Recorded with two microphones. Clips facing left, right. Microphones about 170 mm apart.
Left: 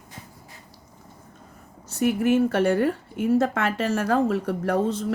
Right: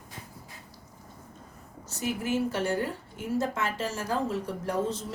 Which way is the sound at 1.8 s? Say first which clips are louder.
Left 10 dB; 60° left (ahead or behind).